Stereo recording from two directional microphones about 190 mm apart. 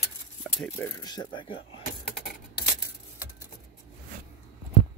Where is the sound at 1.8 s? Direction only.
45° left (ahead or behind).